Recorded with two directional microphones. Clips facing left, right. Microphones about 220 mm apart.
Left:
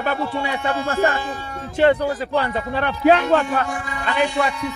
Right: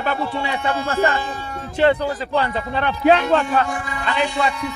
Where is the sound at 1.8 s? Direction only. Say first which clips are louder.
Left 1 dB; 45° left (ahead or behind).